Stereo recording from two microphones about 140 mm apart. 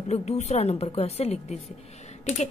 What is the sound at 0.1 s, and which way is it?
Speech, 50° left (ahead or behind).